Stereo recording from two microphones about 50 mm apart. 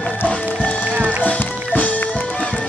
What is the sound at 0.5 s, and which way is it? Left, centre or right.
Music, left.